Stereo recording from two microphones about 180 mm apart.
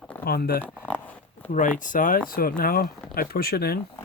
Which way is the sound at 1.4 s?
45° left (ahead or behind).